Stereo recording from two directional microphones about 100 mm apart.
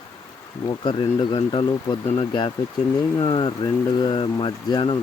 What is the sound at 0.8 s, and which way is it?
Speech, 55° left (ahead or behind).